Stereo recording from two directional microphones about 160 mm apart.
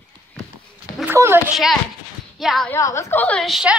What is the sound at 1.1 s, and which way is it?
Speech, 15° right (ahead or behind).